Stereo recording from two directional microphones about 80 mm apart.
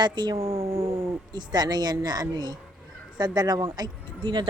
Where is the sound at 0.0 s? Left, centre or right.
Right.